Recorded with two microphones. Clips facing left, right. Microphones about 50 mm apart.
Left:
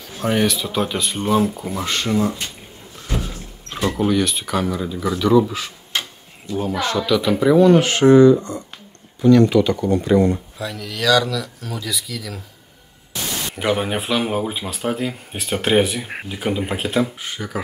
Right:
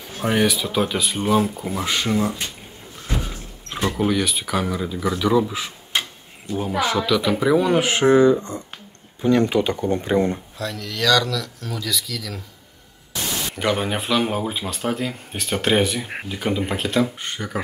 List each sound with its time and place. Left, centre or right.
0.2 s speech: centre
3.9 s speech: centre
5.5 s tick-tock: centre
6.5 s speech: right
6.8 s speech: centre; by 10.4 s right
10.6 s speech: centre
13.6 s speech: centre